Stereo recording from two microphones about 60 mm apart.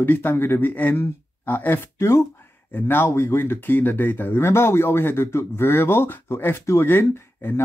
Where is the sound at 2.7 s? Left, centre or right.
Left.